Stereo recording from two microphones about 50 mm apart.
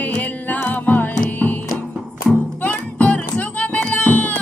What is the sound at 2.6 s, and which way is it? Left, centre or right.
Music, left.